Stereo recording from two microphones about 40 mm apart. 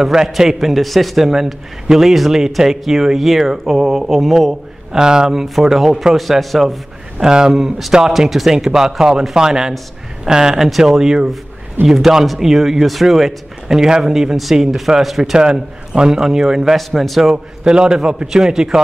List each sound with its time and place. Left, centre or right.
0.0 s a man's voice: centre
4.5 s a man's voice: centre
7.2 s speech: centre
8.1 s speech: centre
11.8 s a man's voice: right
12.4 s a man's voice: centre
13.7 s speech: centre
14.3 s a man's voice: centre
15.3 s a man's voice: centre
16.7 s a man's voice: centre
17.3 s speech: centre